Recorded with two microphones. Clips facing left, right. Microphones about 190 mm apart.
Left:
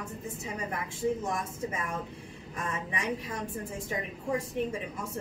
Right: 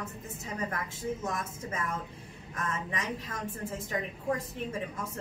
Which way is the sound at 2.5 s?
15° left (ahead or behind).